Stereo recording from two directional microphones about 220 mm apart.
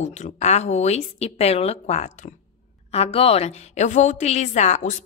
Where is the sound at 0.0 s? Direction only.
30° left (ahead or behind).